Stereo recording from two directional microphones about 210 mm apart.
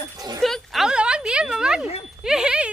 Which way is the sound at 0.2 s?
20° right (ahead or behind).